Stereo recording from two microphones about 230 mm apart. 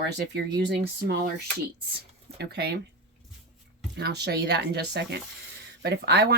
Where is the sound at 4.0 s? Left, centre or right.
Right.